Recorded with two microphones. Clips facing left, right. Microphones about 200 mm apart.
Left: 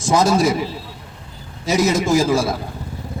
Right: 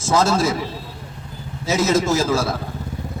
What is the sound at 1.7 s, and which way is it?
Speech, 15° left (ahead or behind).